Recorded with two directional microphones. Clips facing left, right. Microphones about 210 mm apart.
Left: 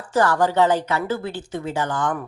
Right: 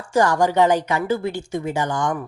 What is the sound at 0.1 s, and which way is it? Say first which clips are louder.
Speech: right 1 dB; 15° right (ahead or behind).